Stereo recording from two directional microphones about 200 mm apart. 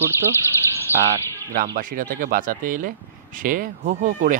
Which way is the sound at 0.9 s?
10° left (ahead or behind).